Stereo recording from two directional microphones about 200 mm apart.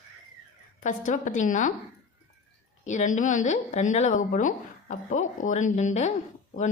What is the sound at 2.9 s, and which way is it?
Speech, 40° left (ahead or behind).